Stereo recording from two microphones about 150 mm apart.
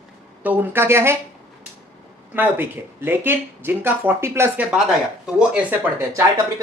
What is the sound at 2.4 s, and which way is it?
Speech, 15° right (ahead or behind).